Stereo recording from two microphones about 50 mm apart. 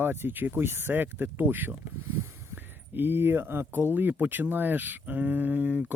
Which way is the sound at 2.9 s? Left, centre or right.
Right.